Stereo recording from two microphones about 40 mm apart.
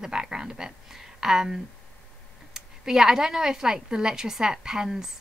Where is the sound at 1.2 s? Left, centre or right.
Centre.